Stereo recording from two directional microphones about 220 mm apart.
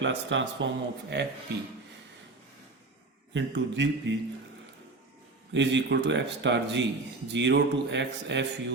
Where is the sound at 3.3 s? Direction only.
55° right (ahead or behind).